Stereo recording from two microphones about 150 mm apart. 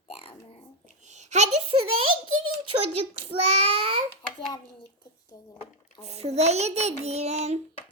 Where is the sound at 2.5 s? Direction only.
40° right (ahead or behind).